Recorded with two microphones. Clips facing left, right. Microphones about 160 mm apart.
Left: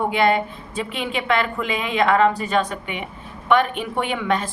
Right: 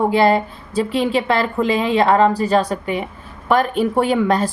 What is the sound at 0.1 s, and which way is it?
Speech, 35° right (ahead or behind).